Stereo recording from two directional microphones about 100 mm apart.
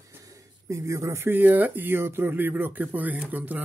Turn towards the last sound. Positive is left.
turn(degrees=-15)  # may be behind; listen again after turning